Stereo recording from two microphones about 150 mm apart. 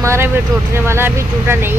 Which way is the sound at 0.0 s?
20° right (ahead or behind).